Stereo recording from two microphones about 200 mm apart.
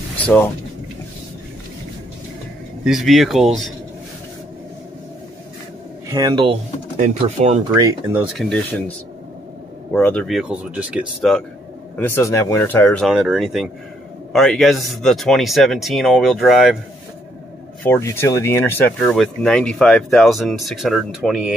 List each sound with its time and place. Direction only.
2.8 s speech: centre (ahead or behind)
6.0 s speech: 20° right (ahead or behind)
7.7 s speech: 15° right (ahead or behind)
8.3 s speech: centre (ahead or behind)
9.9 s speech: 5° left (ahead or behind)
12.0 s speech: 10° left (ahead or behind)
13.0 s speech: centre (ahead or behind)
17.8 s speech: 10° left (ahead or behind)